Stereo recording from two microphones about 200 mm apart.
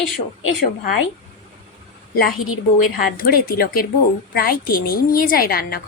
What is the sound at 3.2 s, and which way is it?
A woman's voice, 45° left (ahead or behind).